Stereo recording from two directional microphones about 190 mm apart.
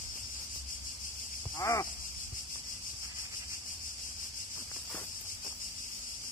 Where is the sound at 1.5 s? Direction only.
15° left (ahead or behind).